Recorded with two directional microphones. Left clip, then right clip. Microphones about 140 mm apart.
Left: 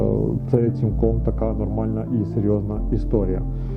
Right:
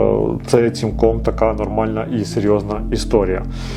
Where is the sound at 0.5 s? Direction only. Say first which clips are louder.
Right 7 dB; 15° right (ahead or behind).